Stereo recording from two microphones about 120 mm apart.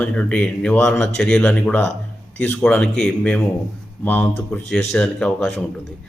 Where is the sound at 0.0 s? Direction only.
10° left (ahead or behind).